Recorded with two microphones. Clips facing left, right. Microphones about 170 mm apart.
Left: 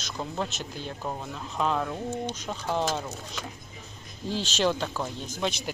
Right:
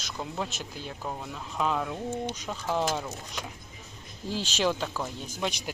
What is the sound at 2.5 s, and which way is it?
Speech, 15° left (ahead or behind).